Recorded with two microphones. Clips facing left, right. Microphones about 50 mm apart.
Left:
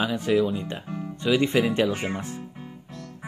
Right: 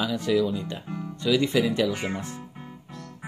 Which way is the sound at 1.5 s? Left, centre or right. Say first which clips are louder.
Left 1 dB; left.